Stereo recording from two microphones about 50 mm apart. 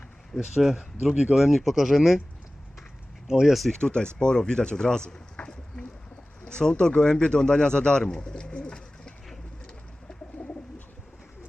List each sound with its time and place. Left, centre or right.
0.3 s speech: centre
3.2 s speech: centre
3.8 s speech: centre
9.6 s bird: centre